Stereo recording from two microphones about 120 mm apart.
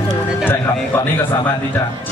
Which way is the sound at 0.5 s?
20° left (ahead or behind).